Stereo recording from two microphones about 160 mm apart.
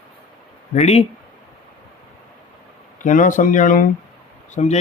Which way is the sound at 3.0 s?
55° left (ahead or behind).